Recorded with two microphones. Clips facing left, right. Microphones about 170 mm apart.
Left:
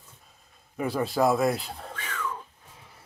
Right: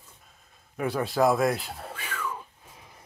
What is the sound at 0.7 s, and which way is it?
Speech, centre (ahead or behind).